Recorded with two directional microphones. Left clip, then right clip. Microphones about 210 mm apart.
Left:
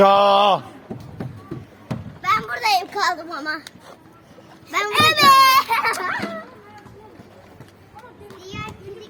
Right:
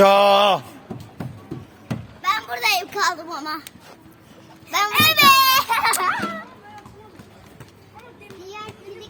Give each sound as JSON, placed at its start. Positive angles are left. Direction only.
{"t": 0.0, "sound": "speech", "side_deg": -30}
{"t": 1.9, "sound": "a sound", "side_deg": -15}
{"t": 3.2, "sound": "a child's voice", "side_deg": -15}
{"t": 4.9, "sound": "a child's voice", "side_deg": -20}
{"t": 5.5, "sound": "speech", "side_deg": -5}